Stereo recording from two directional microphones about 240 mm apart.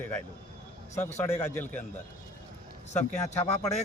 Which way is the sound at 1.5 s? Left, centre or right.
Centre.